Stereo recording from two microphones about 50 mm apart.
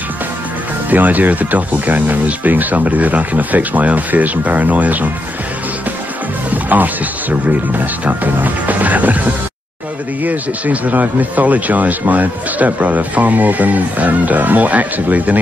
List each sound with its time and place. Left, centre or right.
0.8 s speech: right
6.5 s speech: right